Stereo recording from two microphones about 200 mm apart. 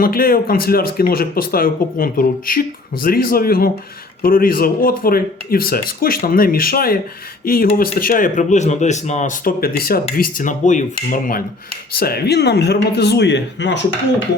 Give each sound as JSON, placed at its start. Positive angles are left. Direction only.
{"t": 0.0, "sound": "speech", "side_deg": 45}